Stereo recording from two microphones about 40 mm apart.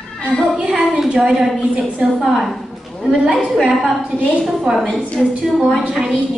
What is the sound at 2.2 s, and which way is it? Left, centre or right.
Speech, centre.